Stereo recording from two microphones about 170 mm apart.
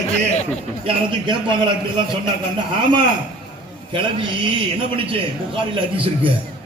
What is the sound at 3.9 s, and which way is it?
Speech, 30° right (ahead or behind).